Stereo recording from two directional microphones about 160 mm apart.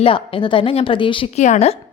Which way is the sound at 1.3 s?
45° left (ahead or behind).